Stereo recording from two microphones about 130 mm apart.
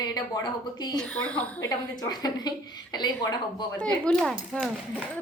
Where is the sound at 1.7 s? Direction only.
30° left (ahead or behind).